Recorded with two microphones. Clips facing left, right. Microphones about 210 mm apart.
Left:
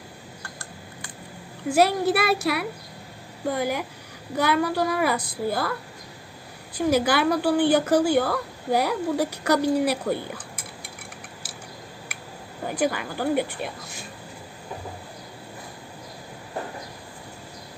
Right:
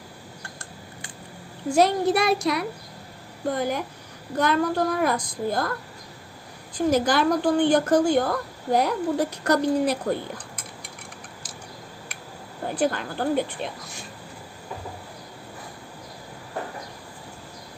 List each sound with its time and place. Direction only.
1.7 s speech: 5° left (ahead or behind)
6.7 s speech: 10° left (ahead or behind)
12.6 s speech: 10° left (ahead or behind)